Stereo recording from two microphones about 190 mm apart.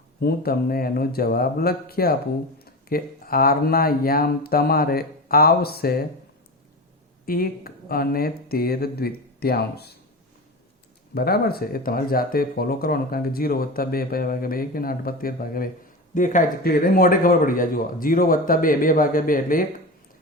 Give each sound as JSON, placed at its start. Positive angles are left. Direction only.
{"t": 0.2, "sound": "speech", "side_deg": 55}
{"t": 7.3, "sound": "speech", "side_deg": 50}
{"t": 11.1, "sound": "speech", "side_deg": 55}